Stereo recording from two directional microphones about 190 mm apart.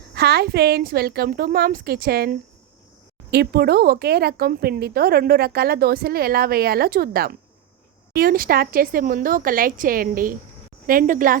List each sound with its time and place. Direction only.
0.1 s a woman's voice: 60° right (ahead or behind)